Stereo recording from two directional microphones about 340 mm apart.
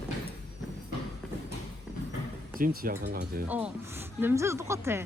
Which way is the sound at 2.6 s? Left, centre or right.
Right.